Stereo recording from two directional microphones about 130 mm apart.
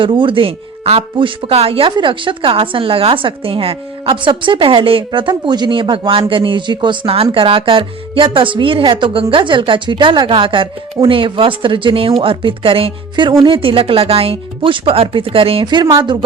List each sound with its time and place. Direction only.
0.0 s speech: 40° right (ahead or behind)